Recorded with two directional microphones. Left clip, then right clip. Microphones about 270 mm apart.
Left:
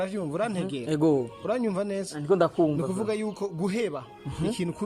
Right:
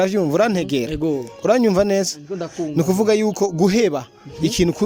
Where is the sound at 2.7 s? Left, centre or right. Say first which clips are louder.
Right 12 dB; right.